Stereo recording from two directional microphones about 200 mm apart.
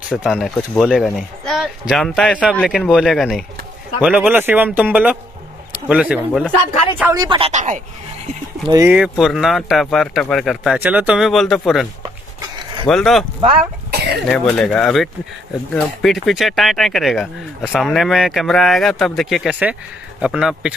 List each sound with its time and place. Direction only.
0.1 s speech: 5° right (ahead or behind)
7.0 s speech: 15° right (ahead or behind); by 7.8 s 35° right (ahead or behind)
8.6 s speech: 15° right (ahead or behind)
8.9 s speech: centre (ahead or behind)
14.3 s speech: 5° left (ahead or behind)